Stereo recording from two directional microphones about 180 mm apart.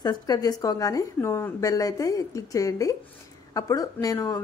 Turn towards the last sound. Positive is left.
turn(degrees=15)  # may be behind; listen again after turning